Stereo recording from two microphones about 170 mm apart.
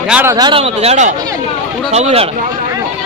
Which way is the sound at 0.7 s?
40° right (ahead or behind).